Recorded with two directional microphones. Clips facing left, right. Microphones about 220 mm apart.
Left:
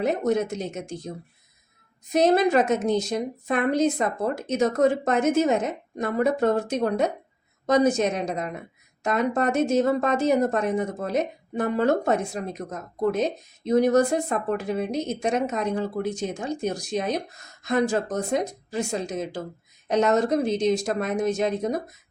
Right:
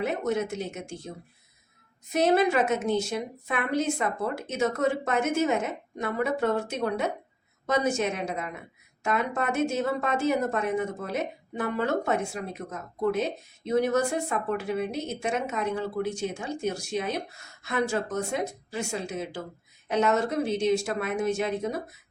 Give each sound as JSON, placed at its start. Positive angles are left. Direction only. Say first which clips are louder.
{"t": 0.0, "sound": "a woman's voice", "louder": "left 4 dB", "side_deg": 40}
{"t": 2.1, "sound": "a woman's voice", "louder": "left 3 dB", "side_deg": 40}